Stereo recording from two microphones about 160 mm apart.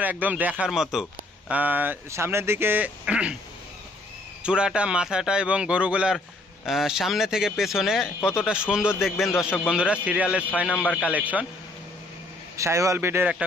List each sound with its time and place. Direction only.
0.0 s a man's voice: 10° right (ahead or behind)
4.4 s a man's voice: 5° right (ahead or behind)
12.5 s a man's voice: 20° right (ahead or behind)